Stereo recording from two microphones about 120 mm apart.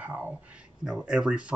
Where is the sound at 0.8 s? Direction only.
5° right (ahead or behind).